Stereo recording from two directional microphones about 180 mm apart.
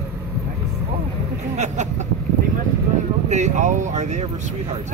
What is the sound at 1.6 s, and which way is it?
Speech, 40° right (ahead or behind).